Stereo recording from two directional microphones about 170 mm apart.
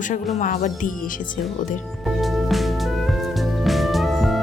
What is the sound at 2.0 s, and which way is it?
Music, centre (ahead or behind).